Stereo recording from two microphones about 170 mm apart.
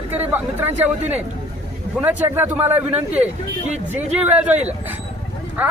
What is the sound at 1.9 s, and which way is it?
Speech, 10° right (ahead or behind).